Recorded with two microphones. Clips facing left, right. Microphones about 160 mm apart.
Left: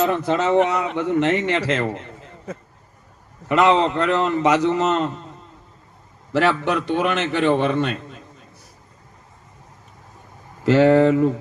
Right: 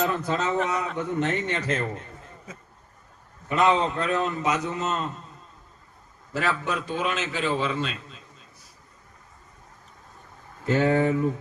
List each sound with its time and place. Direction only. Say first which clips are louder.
0.0 s a man's voice: left 6 dB; 70° left (ahead or behind)
0.9 s a man's voice: left 7 dB; 90° left; by 5.3 s 75° left (ahead or behind)
6.3 s a man's voice: left 8 dB; 70° left (ahead or behind)
10.7 s a man's voice: left 8 dB; 85° left